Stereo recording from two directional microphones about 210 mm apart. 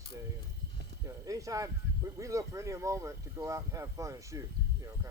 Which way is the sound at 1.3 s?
15° right (ahead or behind).